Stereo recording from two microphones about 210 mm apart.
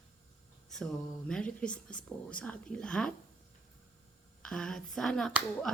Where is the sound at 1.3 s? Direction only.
5° left (ahead or behind).